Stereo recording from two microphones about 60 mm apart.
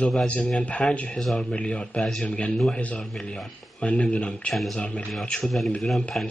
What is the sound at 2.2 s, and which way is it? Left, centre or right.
Speech, centre.